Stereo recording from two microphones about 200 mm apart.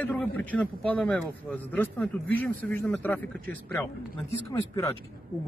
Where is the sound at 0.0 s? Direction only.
10° left (ahead or behind).